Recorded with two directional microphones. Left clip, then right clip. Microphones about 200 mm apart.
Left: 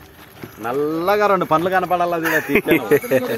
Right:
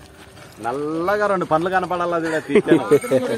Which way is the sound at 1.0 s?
40° left (ahead or behind).